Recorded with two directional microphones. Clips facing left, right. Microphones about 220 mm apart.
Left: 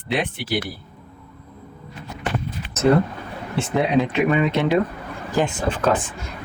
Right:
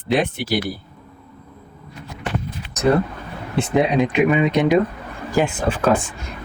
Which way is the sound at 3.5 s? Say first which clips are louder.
Right 2 dB; 15° right (ahead or behind).